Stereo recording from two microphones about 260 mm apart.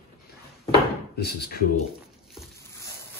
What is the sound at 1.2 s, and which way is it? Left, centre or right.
Speech, left.